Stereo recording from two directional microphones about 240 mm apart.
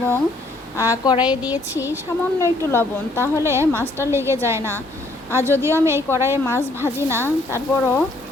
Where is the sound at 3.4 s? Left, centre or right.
Centre.